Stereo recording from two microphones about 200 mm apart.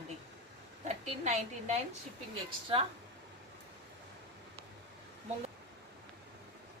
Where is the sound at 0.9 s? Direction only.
35° right (ahead or behind).